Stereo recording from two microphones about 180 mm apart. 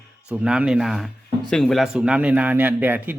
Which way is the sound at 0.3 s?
5° right (ahead or behind).